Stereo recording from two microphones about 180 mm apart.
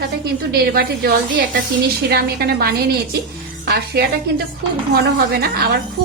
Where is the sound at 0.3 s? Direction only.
60° right (ahead or behind).